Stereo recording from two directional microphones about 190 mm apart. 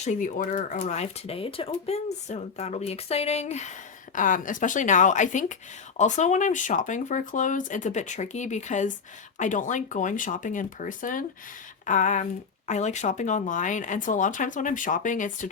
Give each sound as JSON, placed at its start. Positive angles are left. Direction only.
{"t": 0.0, "sound": "speech", "side_deg": 40}